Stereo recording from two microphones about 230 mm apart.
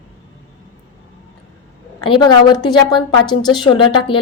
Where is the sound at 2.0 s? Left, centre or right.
Left.